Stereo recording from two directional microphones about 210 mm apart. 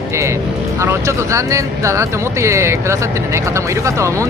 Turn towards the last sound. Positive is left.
turn(degrees=-15)  # may be behind; listen again after turning